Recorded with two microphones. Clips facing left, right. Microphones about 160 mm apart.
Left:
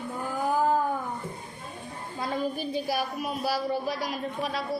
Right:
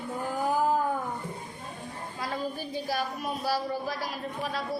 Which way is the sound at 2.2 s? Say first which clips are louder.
Left 4 dB; 20° left (ahead or behind).